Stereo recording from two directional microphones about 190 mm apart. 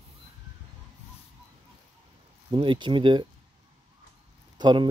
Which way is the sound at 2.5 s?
25° right (ahead or behind).